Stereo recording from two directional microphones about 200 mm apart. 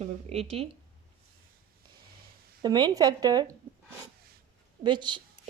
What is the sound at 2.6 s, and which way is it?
Speech, 20° right (ahead or behind).